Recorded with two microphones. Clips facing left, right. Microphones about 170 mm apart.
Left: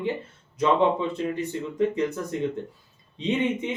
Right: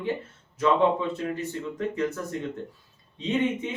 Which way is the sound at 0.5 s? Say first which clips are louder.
Left 1 dB; 20° left (ahead or behind).